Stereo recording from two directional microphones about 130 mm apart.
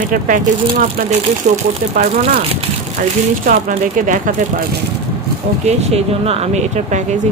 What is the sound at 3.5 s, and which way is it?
Speech, 85° right.